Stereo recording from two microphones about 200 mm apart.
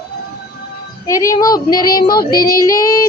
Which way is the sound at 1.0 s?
15° left (ahead or behind).